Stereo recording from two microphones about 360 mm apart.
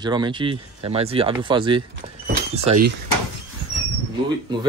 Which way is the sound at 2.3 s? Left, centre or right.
Centre.